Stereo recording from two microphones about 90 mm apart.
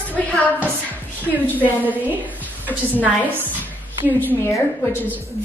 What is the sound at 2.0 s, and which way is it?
A woman's voice, 20° right (ahead or behind).